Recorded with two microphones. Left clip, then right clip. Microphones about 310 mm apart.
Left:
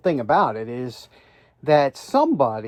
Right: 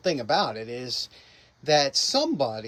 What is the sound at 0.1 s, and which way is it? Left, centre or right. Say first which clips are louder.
Speech: left 6 dB; centre.